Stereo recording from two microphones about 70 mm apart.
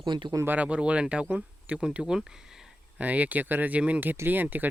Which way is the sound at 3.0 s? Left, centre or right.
Right.